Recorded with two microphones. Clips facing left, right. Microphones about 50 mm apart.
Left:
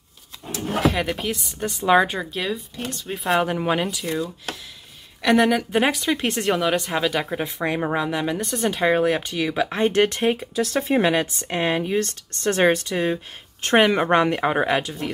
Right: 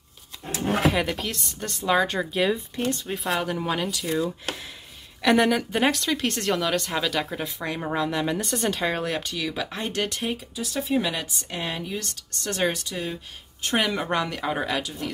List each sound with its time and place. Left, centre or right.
0.8 s speech: centre
2.1 s speech: centre
3.4 s speech: left
4.0 s speech: centre; by 8.1 s left
8.1 s speech: centre; by 10.5 s left
10.5 s speech: left
11.1 s speech: left